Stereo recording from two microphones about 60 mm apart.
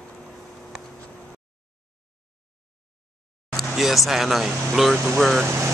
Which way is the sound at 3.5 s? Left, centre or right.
Centre.